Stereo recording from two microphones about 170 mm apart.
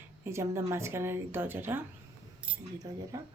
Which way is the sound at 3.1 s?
20° right (ahead or behind).